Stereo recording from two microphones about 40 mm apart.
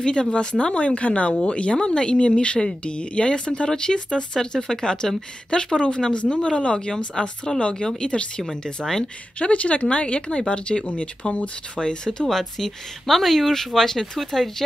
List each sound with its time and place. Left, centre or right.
0.0 s speech: left
0.7 s a woman's voice: left
12.3 s speech: centre